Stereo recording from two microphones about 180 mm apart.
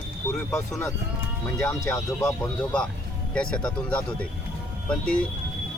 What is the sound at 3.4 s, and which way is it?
Speech, 5° left (ahead or behind).